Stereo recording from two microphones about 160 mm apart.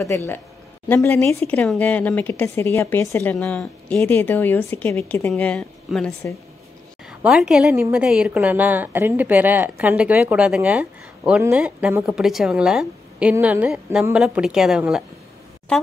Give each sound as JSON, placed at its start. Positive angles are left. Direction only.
{"t": 0.0, "sound": "a woman's voice", "side_deg": 15}